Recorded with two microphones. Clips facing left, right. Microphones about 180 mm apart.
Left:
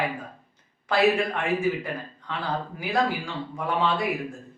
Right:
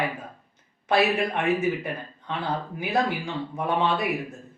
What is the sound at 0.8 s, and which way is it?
Speech, 20° right (ahead or behind).